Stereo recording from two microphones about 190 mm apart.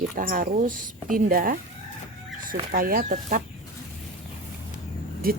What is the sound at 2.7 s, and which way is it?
Speech, 50° right (ahead or behind).